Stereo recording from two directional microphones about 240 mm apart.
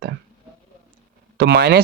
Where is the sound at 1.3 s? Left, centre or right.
Right.